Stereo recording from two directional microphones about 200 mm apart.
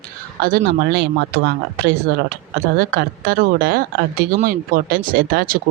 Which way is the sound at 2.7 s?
50° right (ahead or behind).